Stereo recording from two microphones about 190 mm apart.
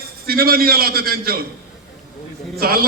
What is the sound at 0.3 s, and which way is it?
A man's voice, 50° right (ahead or behind).